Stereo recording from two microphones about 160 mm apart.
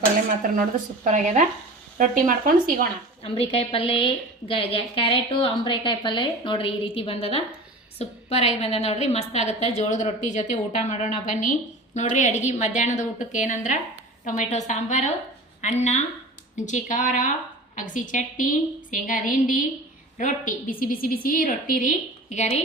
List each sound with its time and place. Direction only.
0.4 s speech: 65° right (ahead or behind)
1.0 s speech: 50° right (ahead or behind)
3.2 s a woman's voice: 40° left (ahead or behind)